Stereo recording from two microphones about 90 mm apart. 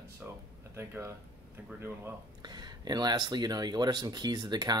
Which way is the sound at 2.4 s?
50° right (ahead or behind).